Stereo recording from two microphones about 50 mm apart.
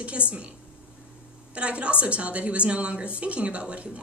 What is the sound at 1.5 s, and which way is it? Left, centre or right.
Speech, right.